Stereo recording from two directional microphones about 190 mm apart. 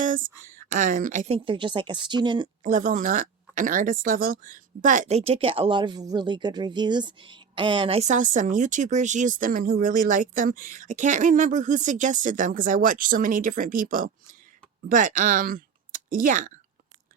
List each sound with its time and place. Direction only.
0.0 s a sound: 45° right (ahead or behind)
0.5 s speech: 45° right (ahead or behind)
1.5 s speech: 25° right (ahead or behind)
2.6 s speech: 45° right (ahead or behind)